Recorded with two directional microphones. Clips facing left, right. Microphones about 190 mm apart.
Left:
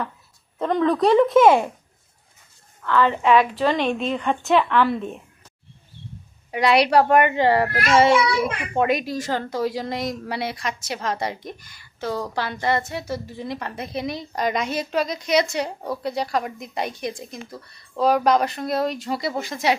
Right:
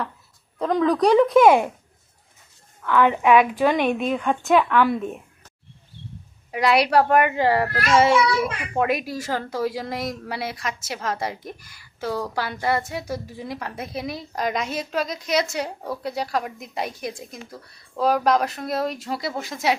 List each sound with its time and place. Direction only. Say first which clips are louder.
0.6 s a child's voice: even; centre (ahead or behind)
2.8 s speech: right 1 dB; 10° right (ahead or behind)
6.5 s a child's voice: left 1 dB; centre (ahead or behind)
7.7 s speech: left 1 dB; 15° left (ahead or behind)
8.4 s a child's voice: left 1 dB; centre (ahead or behind)